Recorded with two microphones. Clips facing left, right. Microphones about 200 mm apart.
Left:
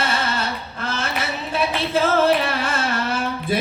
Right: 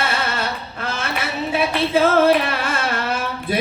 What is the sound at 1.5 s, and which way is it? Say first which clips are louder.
Speech: right 3 dB; 60° right (ahead or behind).